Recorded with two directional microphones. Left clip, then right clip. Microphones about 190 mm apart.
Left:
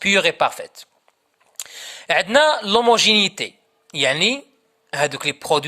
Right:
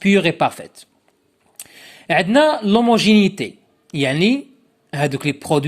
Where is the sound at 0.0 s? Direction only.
15° left (ahead or behind).